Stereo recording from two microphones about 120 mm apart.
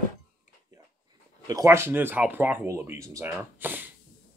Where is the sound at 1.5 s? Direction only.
25° right (ahead or behind).